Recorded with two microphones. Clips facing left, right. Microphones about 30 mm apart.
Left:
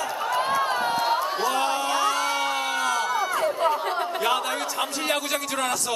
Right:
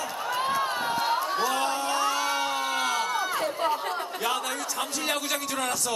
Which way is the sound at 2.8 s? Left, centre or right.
Centre.